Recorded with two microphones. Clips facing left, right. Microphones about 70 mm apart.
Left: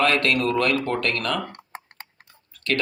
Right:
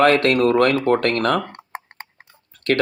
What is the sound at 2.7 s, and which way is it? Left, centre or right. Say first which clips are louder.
Speech: right 7 dB; right.